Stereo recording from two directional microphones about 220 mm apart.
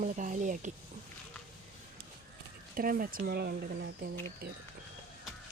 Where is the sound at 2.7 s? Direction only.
40° right (ahead or behind).